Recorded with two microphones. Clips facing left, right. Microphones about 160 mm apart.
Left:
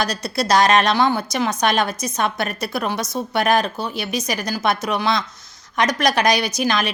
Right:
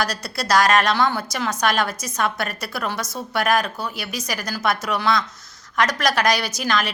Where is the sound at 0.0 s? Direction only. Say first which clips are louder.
Left 3 dB; 20° left (ahead or behind).